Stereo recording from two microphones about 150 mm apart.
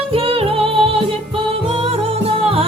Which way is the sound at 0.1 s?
40° right (ahead or behind).